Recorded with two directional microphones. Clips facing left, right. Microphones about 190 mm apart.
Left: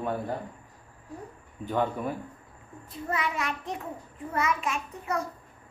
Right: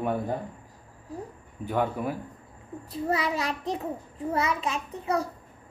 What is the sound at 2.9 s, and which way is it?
Child singing, 35° right (ahead or behind).